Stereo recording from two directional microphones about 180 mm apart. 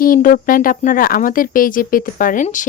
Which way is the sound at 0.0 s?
50° left (ahead or behind).